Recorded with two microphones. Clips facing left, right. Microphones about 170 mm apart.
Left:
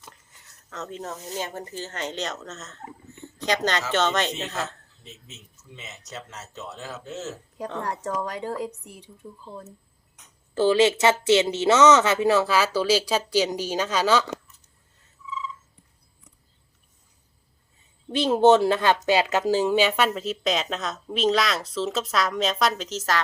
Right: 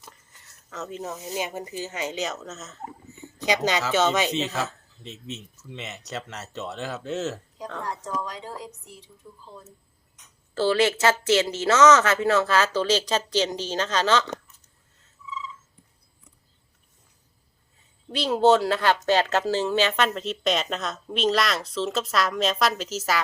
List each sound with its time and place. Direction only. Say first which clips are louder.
0.0 s speech: even; centre (ahead or behind)
5.0 s speech: right 9 dB; 75° right (ahead or behind)
7.8 s speech: left 2 dB; 65° left (ahead or behind)
10.5 s speech: left 3 dB; 15° left (ahead or behind)
18.1 s speech: left 2 dB; 20° left (ahead or behind); by 23.2 s 5° right (ahead or behind)